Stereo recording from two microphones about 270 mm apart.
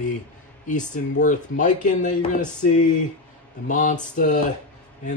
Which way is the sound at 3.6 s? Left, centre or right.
Left.